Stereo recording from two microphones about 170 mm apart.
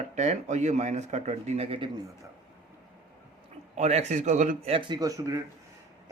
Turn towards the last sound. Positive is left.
turn(degrees=-20)  # may be behind; listen again after turning